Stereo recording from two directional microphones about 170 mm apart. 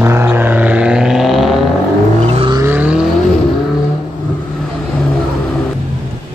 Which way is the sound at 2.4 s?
25° right (ahead or behind).